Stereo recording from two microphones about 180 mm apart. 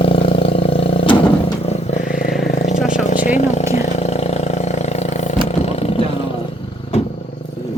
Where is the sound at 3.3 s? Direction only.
40° left (ahead or behind).